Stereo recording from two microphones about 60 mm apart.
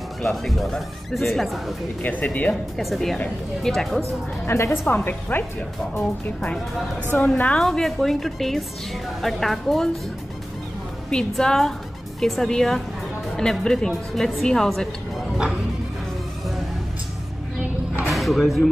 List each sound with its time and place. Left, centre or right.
0.2 s speech: centre
2.0 s a woman's voice: left
2.8 s speech: centre
4.5 s a woman's voice: left
7.1 s a woman's voice: left
7.6 s speech: centre
11.1 s a woman's voice: centre
18.0 s speech: centre